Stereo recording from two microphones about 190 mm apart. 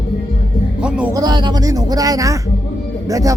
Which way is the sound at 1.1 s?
20° right (ahead or behind).